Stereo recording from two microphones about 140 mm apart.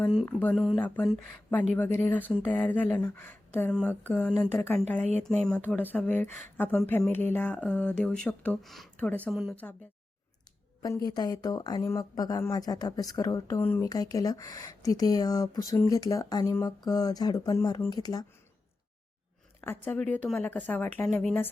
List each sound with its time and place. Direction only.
0.5 s speech: centre (ahead or behind)
0.8 s speech: 15° left (ahead or behind)
10.8 s speech: 25° left (ahead or behind)
13.9 s speech: 25° left (ahead or behind)
19.6 s speech: 15° left (ahead or behind)